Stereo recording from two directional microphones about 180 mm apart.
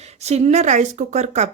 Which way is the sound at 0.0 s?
35° right (ahead or behind).